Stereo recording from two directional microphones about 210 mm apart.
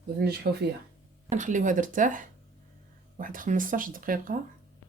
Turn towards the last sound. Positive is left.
turn(degrees=-40)  # may be behind; listen again after turning